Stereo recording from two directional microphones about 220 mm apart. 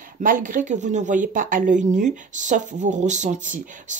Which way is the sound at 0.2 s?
40° right (ahead or behind).